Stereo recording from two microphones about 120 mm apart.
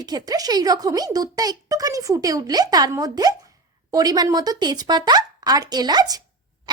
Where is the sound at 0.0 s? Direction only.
35° right (ahead or behind).